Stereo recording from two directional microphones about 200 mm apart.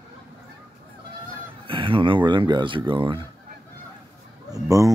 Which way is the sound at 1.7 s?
25° right (ahead or behind).